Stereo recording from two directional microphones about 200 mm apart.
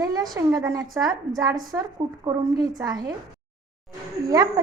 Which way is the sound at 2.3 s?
20° right (ahead or behind).